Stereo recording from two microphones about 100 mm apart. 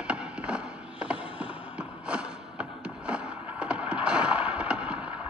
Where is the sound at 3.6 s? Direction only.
10° right (ahead or behind).